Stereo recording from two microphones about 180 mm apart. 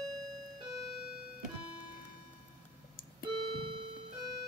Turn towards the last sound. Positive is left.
turn(degrees=-30)  # may be behind; listen again after turning